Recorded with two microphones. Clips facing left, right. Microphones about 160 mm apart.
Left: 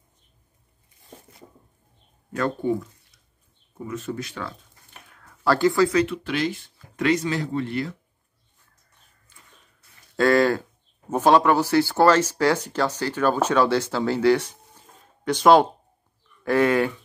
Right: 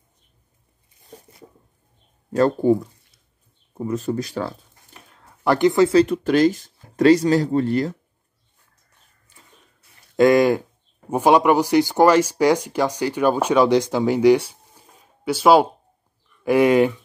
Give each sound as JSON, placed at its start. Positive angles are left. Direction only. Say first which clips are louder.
{"t": 2.3, "sound": "speech", "louder": "right 7 dB", "side_deg": -35}
{"t": 5.2, "sound": "speech", "louder": "right 3 dB", "side_deg": -20}
{"t": 5.9, "sound": "speech", "louder": "right 7 dB", "side_deg": -40}
{"t": 10.1, "sound": "speech", "louder": "right 4 dB", "side_deg": -15}